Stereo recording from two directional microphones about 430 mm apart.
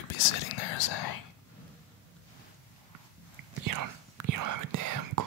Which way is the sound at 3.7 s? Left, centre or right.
Right.